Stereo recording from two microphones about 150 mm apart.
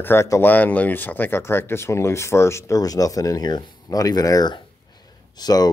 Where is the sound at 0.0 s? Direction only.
15° left (ahead or behind).